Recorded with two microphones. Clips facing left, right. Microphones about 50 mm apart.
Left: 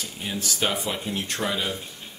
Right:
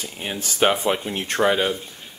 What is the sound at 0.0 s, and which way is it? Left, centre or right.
Speech, right.